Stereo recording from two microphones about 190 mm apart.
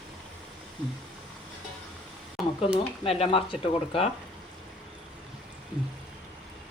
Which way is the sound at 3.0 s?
30° left (ahead or behind).